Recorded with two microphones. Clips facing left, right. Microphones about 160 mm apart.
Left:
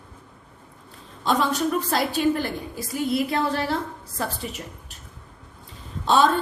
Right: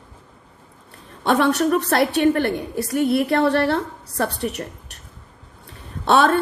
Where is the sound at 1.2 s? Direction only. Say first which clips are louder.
Right 5 dB; 65° right (ahead or behind).